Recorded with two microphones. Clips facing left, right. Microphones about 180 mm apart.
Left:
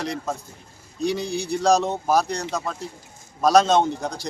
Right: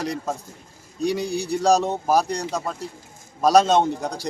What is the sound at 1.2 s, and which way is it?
Speech, 35° right (ahead or behind).